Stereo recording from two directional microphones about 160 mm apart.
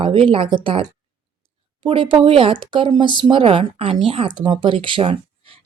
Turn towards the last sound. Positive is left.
turn(degrees=-35)  # may be behind; listen again after turning